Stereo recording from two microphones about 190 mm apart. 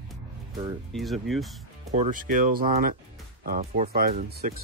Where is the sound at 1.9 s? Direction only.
40° right (ahead or behind).